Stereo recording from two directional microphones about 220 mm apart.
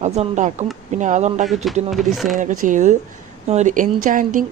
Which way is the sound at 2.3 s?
35° right (ahead or behind).